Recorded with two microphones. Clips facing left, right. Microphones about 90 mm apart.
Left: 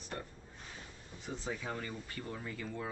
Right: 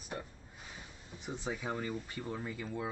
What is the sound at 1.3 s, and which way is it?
Speech, 20° right (ahead or behind).